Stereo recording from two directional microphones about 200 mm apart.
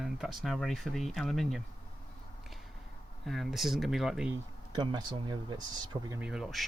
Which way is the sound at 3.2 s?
Centre (ahead or behind).